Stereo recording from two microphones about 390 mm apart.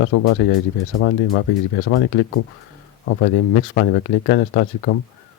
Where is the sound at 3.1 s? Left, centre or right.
Left.